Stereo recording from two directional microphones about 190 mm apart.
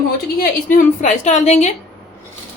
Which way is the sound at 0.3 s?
45° left (ahead or behind).